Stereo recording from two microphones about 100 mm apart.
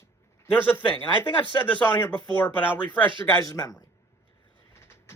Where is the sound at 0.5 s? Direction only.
20° left (ahead or behind).